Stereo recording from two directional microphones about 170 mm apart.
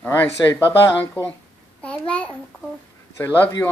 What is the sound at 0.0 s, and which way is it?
Speech, 10° left (ahead or behind).